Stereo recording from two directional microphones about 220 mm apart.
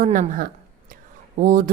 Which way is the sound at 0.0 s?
40° right (ahead or behind).